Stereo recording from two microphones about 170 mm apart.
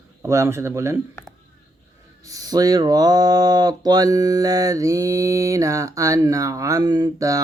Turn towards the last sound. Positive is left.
turn(degrees=-20)  # may be behind; listen again after turning